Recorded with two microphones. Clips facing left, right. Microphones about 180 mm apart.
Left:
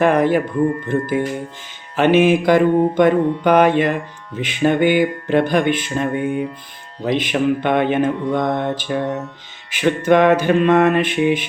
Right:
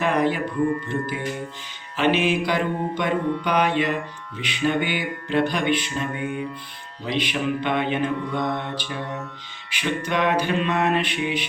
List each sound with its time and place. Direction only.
0.0 s mantra: 50° left (ahead or behind)